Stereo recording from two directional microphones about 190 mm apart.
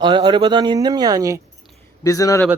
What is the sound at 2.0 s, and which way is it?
Speech, 15° left (ahead or behind).